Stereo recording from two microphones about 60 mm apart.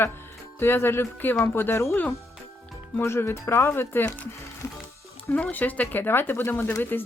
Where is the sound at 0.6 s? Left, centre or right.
Left.